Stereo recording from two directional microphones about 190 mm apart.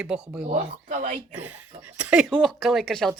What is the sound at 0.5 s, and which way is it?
Speech, 40° right (ahead or behind).